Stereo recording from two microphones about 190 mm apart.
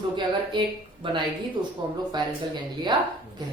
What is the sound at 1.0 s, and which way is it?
Speech, 25° right (ahead or behind).